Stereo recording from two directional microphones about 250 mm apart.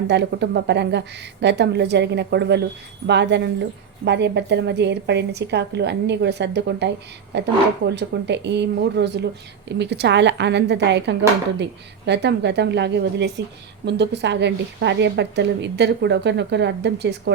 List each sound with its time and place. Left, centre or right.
0.1 s a woman's voice: right